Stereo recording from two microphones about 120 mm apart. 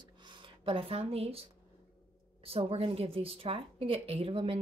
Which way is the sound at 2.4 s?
55° right (ahead or behind).